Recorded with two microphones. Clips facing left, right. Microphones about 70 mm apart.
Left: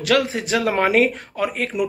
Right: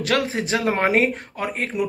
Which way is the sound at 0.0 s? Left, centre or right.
Right.